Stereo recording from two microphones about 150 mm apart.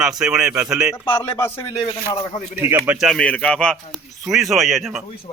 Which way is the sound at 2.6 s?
15° right (ahead or behind).